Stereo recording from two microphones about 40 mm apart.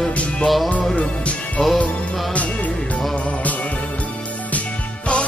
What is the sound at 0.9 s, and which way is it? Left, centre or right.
Music, left.